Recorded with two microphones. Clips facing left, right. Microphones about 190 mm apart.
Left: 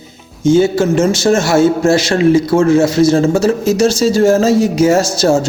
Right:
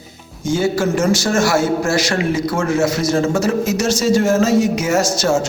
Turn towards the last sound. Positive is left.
turn(degrees=35)  # may be behind; listen again after turning